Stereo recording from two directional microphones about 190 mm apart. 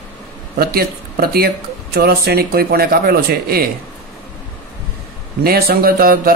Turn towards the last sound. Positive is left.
turn(degrees=-50)  # may be behind; listen again after turning